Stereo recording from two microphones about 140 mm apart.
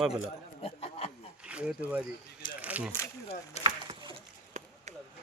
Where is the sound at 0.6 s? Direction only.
45° left (ahead or behind).